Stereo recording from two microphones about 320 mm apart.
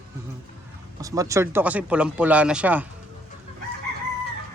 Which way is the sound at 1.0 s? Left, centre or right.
Centre.